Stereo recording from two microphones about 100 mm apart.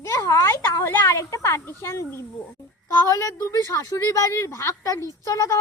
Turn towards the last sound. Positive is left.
turn(degrees=35)  # may be behind; listen again after turning